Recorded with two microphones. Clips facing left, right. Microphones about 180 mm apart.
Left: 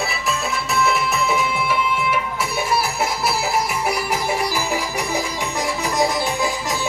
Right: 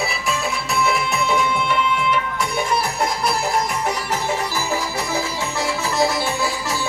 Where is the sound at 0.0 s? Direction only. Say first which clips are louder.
Right 1 dB; centre (ahead or behind).